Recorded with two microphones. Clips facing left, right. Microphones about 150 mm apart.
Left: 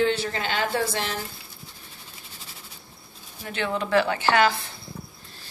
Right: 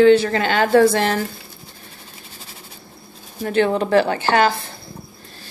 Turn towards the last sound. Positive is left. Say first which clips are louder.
# right 4 dB
turn(degrees=-35)  # may be behind; listen again after turning